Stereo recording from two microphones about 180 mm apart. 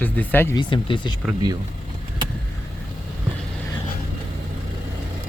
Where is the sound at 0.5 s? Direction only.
25° left (ahead or behind).